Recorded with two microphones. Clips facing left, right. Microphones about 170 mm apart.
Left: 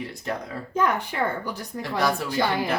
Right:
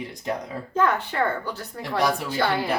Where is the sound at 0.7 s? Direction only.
15° left (ahead or behind).